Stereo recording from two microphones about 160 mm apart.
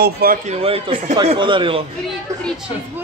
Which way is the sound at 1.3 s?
30° right (ahead or behind).